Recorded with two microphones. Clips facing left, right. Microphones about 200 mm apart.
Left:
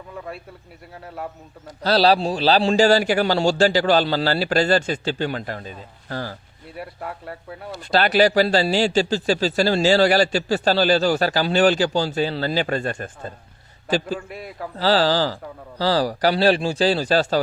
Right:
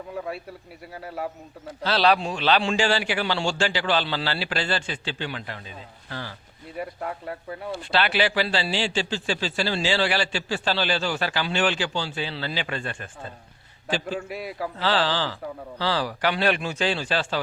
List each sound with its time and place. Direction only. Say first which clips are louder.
0.9 s speech: right 1 dB; centre (ahead or behind)
1.8 s a man's voice: left 4 dB; 35° left (ahead or behind)
6.7 s speech: right 1 dB; centre (ahead or behind)
7.7 s a man's voice: left 5 dB; 40° left (ahead or behind)
14.2 s speech: right 2 dB; 5° right (ahead or behind)
14.8 s a man's voice: left 7 dB; 35° left (ahead or behind)